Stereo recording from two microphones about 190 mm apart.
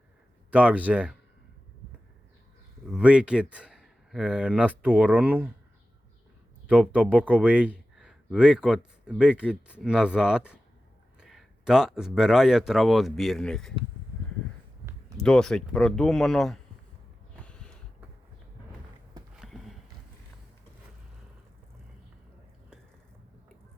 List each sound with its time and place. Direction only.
0.5 s speech: 5° right (ahead or behind)
2.9 s speech: 5° right (ahead or behind)
6.7 s a man's voice: 10° right (ahead or behind)
15.2 s speech: 5° left (ahead or behind)
17.4 s a sound: 5° left (ahead or behind)
19.4 s clip-clop: centre (ahead or behind)